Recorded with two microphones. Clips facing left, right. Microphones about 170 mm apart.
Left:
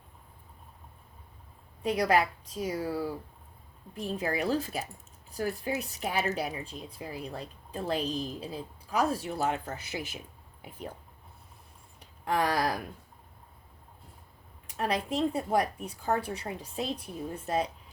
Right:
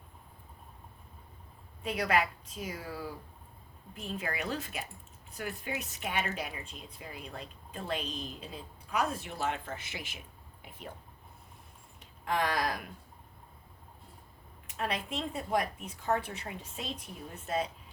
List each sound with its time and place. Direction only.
1.8 s a woman's voice: 35° left (ahead or behind)
11.9 s a sound: 35° left (ahead or behind)
14.8 s a woman's voice: 35° left (ahead or behind)